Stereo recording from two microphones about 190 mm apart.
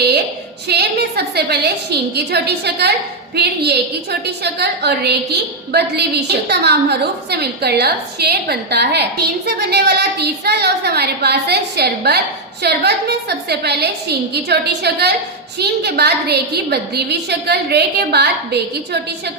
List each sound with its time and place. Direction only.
0.7 s a woman's voice: 60° right (ahead or behind)